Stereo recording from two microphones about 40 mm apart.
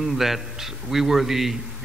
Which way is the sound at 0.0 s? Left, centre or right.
Centre.